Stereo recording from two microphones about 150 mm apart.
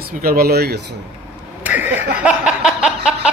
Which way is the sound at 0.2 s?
80° right.